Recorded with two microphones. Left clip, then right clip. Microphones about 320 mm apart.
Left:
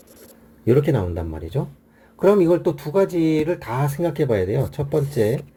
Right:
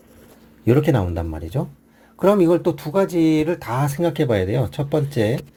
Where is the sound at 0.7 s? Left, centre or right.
Right.